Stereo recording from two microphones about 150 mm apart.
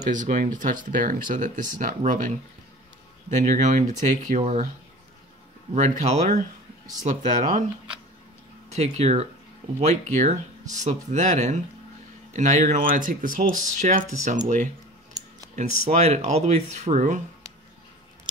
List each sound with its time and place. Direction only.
0.1 s speech: 60° right (ahead or behind)
5.8 s speech: 50° right (ahead or behind)
8.6 s speech: 45° right (ahead or behind)
15.5 s speech: 50° right (ahead or behind)